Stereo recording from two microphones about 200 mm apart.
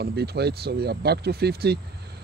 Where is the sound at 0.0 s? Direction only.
55° right (ahead or behind).